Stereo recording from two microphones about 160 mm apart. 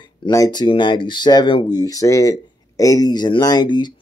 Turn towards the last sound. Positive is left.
turn(degrees=30)  # may be behind; listen again after turning